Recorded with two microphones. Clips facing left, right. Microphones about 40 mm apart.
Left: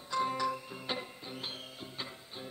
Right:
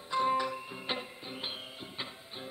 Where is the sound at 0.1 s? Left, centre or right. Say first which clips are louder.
Right 3 dB; right.